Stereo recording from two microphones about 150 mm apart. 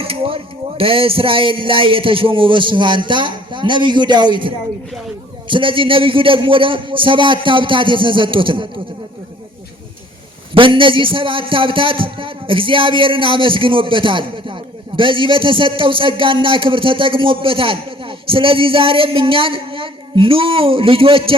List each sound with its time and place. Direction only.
0.0 s a man's voice: 40° right (ahead or behind)
10.5 s a man's voice: 35° right (ahead or behind)